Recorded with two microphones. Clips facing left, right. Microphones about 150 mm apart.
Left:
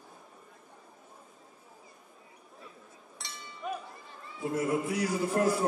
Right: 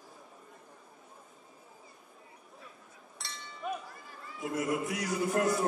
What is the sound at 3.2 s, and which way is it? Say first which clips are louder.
Chink: even; centre (ahead or behind).